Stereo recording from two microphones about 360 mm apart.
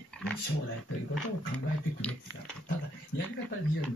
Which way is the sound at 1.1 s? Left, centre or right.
Centre.